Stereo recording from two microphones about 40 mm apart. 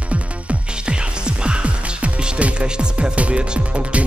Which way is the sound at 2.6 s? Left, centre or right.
Right.